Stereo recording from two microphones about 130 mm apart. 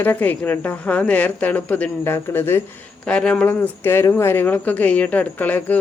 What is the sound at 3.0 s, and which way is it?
Speech, 5° left (ahead or behind).